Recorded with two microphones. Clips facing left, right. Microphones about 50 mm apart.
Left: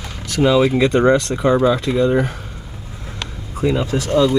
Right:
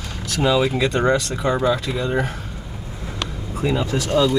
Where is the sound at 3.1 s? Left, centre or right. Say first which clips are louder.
Right 2 dB; centre.